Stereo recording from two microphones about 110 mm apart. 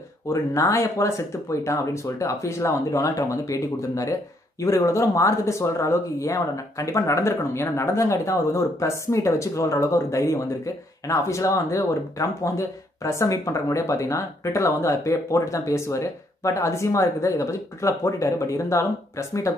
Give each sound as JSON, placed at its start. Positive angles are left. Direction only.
{"t": 0.3, "sound": "speech", "side_deg": 30}